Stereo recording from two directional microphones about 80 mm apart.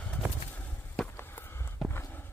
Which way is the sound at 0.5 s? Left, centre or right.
Left.